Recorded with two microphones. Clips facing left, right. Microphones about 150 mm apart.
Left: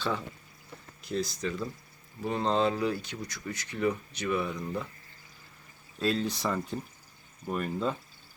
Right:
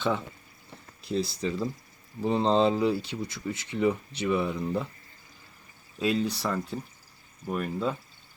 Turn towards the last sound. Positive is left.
turn(degrees=0)  # may be behind; listen again after turning